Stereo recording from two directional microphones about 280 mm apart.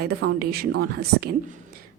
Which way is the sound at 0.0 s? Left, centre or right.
Right.